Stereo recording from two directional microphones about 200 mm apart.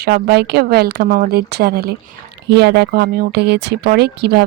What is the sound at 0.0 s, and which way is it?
Speech, 55° right (ahead or behind).